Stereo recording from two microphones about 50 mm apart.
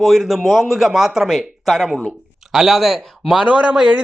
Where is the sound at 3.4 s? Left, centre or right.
Right.